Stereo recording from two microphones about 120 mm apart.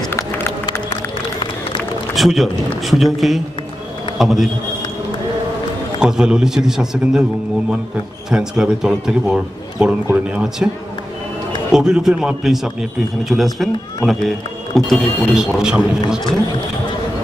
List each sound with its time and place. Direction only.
0.1 s a sound: 20° left (ahead or behind)
2.1 s speech: centre (ahead or behind)
5.9 s speech: 5° right (ahead or behind)
8.3 s a man's voice: 5° right (ahead or behind)
11.7 s speech: 5° right (ahead or behind)